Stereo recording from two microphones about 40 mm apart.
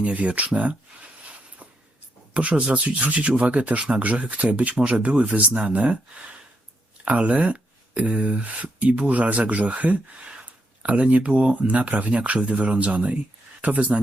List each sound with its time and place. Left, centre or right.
0.0 s speech: right
2.3 s speech: right
7.0 s speech: right